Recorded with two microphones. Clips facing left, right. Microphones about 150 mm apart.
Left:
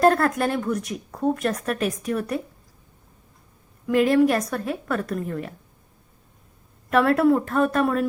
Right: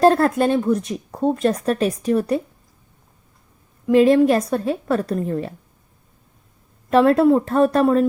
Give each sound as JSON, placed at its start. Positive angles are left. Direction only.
{"t": 0.0, "sound": "speech", "side_deg": -30}
{"t": 3.8, "sound": "speech", "side_deg": -25}
{"t": 6.9, "sound": "speech", "side_deg": -25}